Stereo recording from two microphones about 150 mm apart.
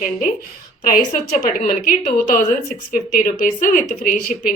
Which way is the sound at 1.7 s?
65° left (ahead or behind).